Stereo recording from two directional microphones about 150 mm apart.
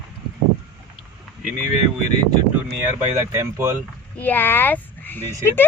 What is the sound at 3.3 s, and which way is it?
Speech, 15° right (ahead or behind).